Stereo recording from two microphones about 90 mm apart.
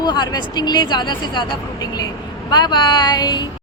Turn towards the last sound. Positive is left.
turn(degrees=50)  # may be behind; listen again after turning